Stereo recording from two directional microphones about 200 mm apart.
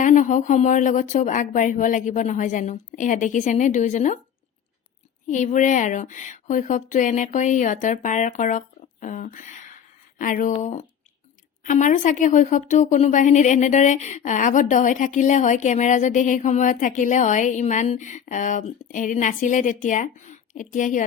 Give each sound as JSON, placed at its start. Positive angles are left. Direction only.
{"t": 0.0, "sound": "speech", "side_deg": 40}
{"t": 5.3, "sound": "speech", "side_deg": 40}